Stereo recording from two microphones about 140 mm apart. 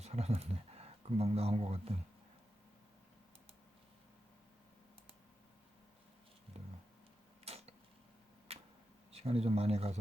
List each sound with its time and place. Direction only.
0.0 s speech: 50° right (ahead or behind)
9.1 s speech: 45° right (ahead or behind)